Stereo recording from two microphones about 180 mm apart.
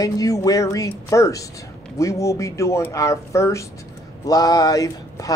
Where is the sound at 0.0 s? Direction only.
20° left (ahead or behind).